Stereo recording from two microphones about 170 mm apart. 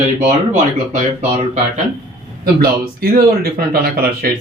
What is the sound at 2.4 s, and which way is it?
Speech, 60° right (ahead or behind).